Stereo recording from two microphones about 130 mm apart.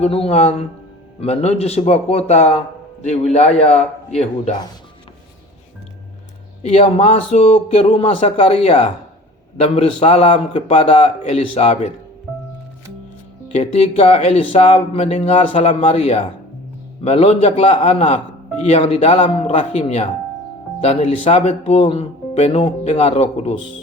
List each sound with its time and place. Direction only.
0.0 s speech: 50° left (ahead or behind)
6.6 s speech: 60° left (ahead or behind)
13.5 s speech: 55° left (ahead or behind)